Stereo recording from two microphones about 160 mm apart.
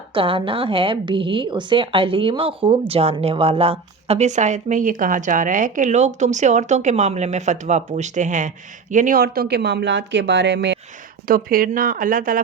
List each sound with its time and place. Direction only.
0.1 s speech: 35° right (ahead or behind); by 10.8 s 90° right
11.3 s speech: 65° right (ahead or behind)